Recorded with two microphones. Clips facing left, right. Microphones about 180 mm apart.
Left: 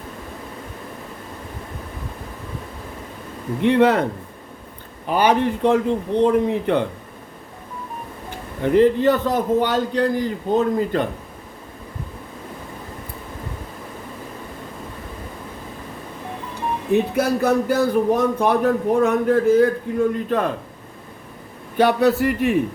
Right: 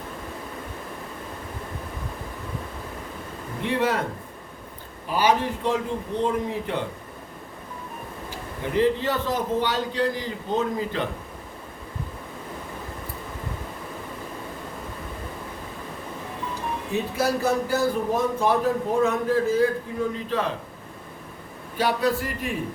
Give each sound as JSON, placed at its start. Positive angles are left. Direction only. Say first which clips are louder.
{"t": 3.6, "sound": "speech", "louder": "left 9 dB", "side_deg": 60}
{"t": 5.0, "sound": "speech", "louder": "left 4 dB", "side_deg": 60}
{"t": 8.7, "sound": "a man's voice", "louder": "left 7 dB", "side_deg": 50}
{"t": 16.9, "sound": "speech", "louder": "left 6 dB", "side_deg": 60}
{"t": 21.8, "sound": "speech", "louder": "left 7 dB", "side_deg": 65}